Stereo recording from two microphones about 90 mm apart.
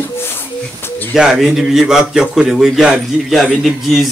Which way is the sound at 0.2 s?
25° left (ahead or behind).